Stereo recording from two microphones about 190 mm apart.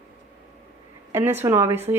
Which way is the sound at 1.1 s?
10° right (ahead or behind).